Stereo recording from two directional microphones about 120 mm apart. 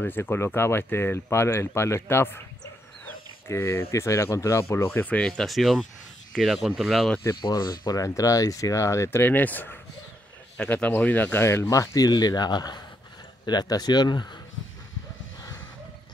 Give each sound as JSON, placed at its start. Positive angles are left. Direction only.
{"t": 0.0, "sound": "speech", "side_deg": 15}
{"t": 3.1, "sound": "dog", "side_deg": 20}
{"t": 3.9, "sound": "speech", "side_deg": 25}
{"t": 7.4, "sound": "speech", "side_deg": 35}